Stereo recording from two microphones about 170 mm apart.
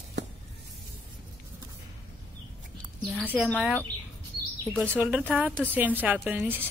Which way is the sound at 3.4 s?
Centre (ahead or behind).